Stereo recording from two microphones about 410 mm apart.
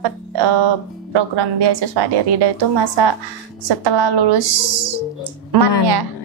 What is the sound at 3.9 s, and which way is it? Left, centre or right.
A woman's voice, right.